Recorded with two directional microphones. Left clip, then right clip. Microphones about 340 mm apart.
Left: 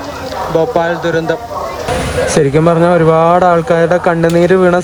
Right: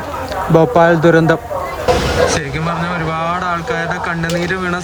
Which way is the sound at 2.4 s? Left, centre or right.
Centre.